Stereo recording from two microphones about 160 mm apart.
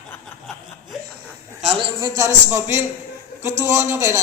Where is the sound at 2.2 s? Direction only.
15° right (ahead or behind).